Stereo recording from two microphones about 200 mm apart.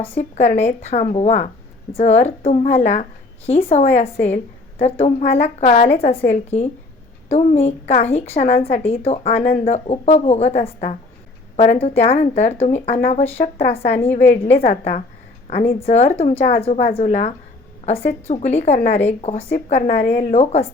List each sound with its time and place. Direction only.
0.2 s a woman's voice: 35° left (ahead or behind)